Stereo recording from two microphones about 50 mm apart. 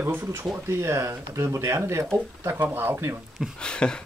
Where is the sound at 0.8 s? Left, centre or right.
Right.